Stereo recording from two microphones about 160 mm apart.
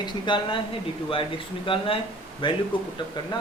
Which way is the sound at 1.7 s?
35° left (ahead or behind).